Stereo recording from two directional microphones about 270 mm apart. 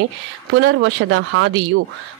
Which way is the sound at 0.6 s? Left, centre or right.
Right.